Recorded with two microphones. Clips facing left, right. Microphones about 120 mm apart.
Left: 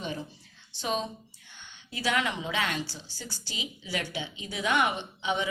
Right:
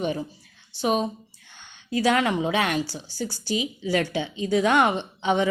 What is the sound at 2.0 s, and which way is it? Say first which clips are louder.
A woman's voice: right 7 dB; 50° right (ahead or behind).